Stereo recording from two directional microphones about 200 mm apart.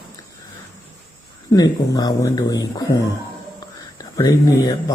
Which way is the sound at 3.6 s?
20° left (ahead or behind).